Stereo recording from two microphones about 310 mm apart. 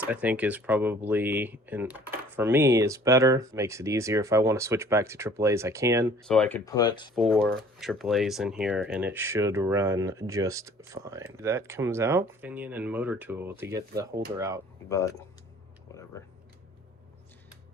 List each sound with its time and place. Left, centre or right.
0.0 s speech: centre
6.2 s speech: centre
7.2 s speech: centre
14.8 s speech: centre